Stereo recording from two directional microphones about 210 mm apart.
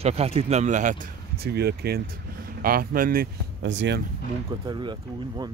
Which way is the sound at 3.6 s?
60° right (ahead or behind).